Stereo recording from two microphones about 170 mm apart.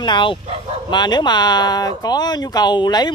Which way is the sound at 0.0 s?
25° left (ahead or behind).